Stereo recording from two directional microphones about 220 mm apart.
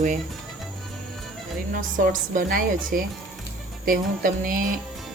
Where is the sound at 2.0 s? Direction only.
40° right (ahead or behind).